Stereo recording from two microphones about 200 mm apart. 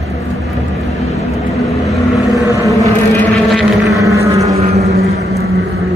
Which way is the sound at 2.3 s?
15° left (ahead or behind).